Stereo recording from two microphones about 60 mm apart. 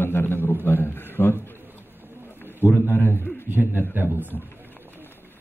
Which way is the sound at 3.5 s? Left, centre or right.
Right.